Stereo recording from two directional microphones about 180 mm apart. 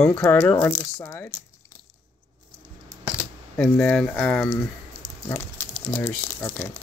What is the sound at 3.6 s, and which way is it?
Speech, 5° left (ahead or behind).